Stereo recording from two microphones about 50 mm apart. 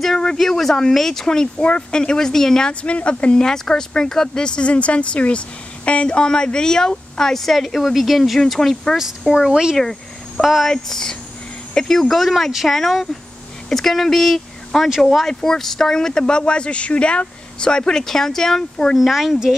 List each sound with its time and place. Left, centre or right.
0.0 s speech: centre
2.7 s speech: left
3.4 s speech: centre
9.3 s speech: centre
9.8 s a sound: centre
10.4 s speech: centre
10.7 s speech: centre
12.2 s speech: centre
18.9 s speech: centre